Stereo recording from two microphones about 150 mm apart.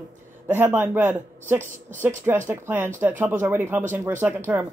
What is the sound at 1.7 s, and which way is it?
Speech, 55° right (ahead or behind).